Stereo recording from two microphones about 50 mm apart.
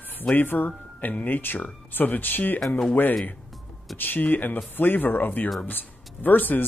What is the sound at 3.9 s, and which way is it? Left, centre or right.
Speech, left.